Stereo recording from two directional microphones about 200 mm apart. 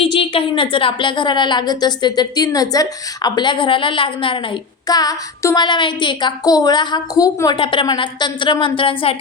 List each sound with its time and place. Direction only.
0.0 s a woman's voice: 25° left (ahead or behind)